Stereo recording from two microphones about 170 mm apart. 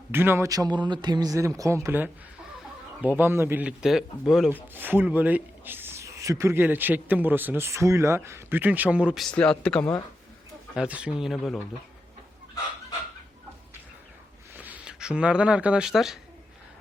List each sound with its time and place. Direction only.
0.1 s a man's voice: 15° right (ahead or behind); by 9.8 s 5° left (ahead or behind)
10.8 s speech: 5° right (ahead or behind)
14.6 s speech: 5° right (ahead or behind)